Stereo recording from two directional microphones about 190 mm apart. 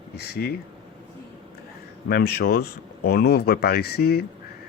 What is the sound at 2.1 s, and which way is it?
Speech, 55° left (ahead or behind).